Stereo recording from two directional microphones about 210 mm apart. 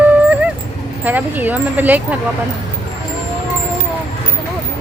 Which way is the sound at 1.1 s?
10° right (ahead or behind).